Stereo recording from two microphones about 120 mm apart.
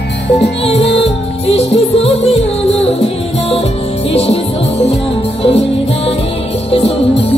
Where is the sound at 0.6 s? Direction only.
55° left (ahead or behind).